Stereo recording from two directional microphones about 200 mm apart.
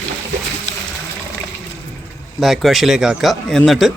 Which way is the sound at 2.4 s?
Centre (ahead or behind).